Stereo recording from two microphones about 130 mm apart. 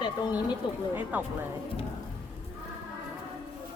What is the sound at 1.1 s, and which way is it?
Speech, 15° right (ahead or behind).